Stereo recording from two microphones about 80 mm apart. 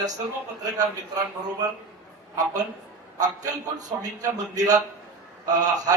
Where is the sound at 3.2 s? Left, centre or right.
Right.